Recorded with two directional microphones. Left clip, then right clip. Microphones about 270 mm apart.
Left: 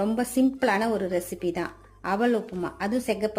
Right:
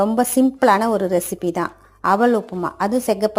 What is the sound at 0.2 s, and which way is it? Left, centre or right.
A woman's voice, centre.